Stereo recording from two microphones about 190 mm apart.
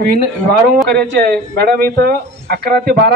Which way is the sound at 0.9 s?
55° right (ahead or behind).